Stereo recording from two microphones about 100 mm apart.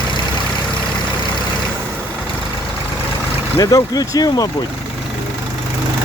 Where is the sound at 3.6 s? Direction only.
35° left (ahead or behind).